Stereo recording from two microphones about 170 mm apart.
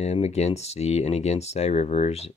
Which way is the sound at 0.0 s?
40° left (ahead or behind).